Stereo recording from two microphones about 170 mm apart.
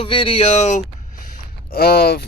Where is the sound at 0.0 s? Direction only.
30° left (ahead or behind).